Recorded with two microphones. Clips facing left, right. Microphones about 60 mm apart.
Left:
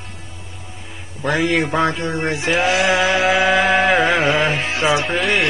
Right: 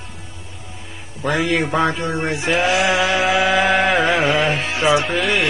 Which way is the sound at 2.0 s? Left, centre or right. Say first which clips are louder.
Even; centre.